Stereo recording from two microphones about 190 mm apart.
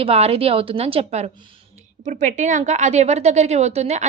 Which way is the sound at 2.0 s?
40° right (ahead or behind).